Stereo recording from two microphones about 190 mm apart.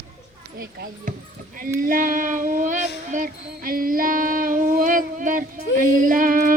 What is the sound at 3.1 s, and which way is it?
Child singing, 45° right (ahead or behind).